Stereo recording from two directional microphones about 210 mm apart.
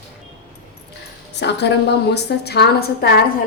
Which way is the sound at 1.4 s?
55° left (ahead or behind).